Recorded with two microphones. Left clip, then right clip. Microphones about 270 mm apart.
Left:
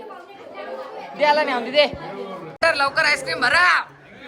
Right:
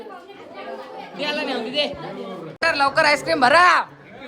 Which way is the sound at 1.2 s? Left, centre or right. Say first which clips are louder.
Left 7 dB; centre.